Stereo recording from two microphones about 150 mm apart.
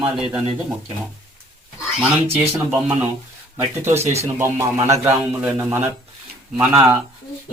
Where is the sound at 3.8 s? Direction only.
15° right (ahead or behind).